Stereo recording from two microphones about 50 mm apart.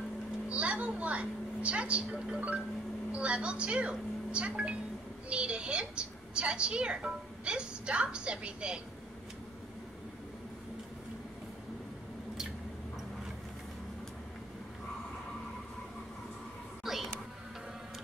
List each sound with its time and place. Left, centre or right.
0.5 s a woman's voice: right
2.1 s speech: centre
3.1 s a woman's voice: right
16.8 s a sound: centre